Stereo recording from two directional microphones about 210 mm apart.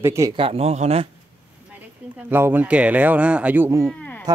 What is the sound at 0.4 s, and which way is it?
Speech, 30° right (ahead or behind).